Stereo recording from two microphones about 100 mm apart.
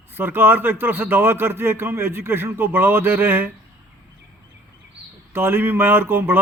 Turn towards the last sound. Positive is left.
turn(degrees=-20)  # may be behind; listen again after turning